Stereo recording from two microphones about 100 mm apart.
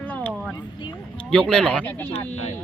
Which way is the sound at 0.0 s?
15° left (ahead or behind).